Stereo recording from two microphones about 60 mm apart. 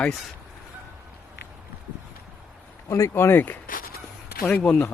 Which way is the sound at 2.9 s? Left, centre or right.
Left.